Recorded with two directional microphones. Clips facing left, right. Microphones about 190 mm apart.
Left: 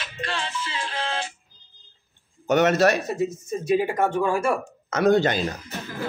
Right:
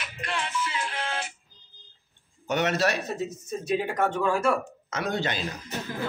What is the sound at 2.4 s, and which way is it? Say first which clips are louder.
Speech: left 7 dB; 45° left (ahead or behind).